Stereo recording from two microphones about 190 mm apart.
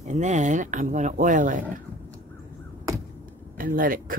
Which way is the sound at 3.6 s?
45° right (ahead or behind).